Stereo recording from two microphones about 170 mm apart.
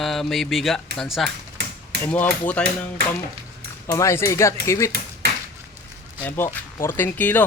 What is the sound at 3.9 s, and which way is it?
Speech, 15° left (ahead or behind).